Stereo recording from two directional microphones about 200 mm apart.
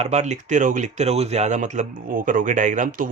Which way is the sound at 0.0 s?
35° right (ahead or behind).